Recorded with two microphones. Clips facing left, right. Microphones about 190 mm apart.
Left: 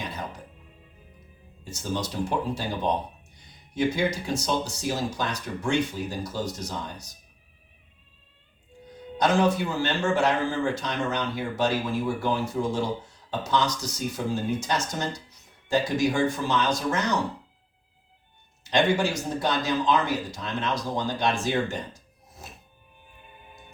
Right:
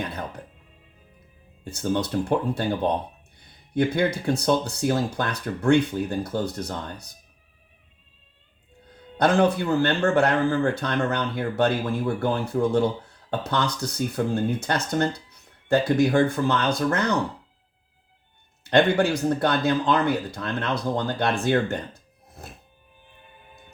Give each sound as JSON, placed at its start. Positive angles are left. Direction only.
{"t": 0.0, "sound": "music", "side_deg": -60}
{"t": 1.6, "sound": "speech", "side_deg": -60}
{"t": 9.1, "sound": "speech", "side_deg": -60}
{"t": 18.6, "sound": "speech", "side_deg": -60}